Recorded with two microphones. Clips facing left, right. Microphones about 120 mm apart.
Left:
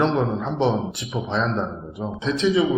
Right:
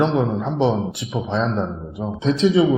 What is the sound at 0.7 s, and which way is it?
Speech, centre (ahead or behind).